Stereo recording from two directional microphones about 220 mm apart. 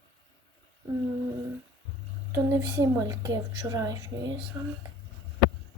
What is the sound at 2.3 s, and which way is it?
Speech, 10° right (ahead or behind).